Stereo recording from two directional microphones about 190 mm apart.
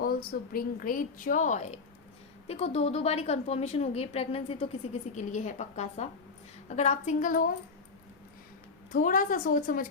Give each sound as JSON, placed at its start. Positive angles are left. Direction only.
{"t": 0.0, "sound": "a woman's voice", "side_deg": 50}
{"t": 8.9, "sound": "a woman's voice", "side_deg": 45}